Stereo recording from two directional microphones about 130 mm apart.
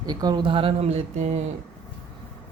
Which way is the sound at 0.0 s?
30° right (ahead or behind).